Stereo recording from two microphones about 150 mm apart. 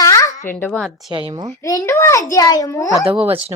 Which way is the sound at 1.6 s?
20° left (ahead or behind).